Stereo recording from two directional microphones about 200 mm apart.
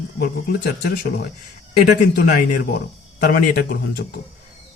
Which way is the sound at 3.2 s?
50° left (ahead or behind).